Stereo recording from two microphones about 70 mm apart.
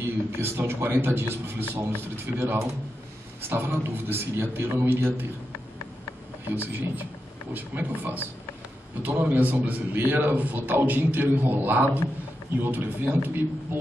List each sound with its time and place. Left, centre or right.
0.0 s a man's voice: right
6.5 s a man's voice: right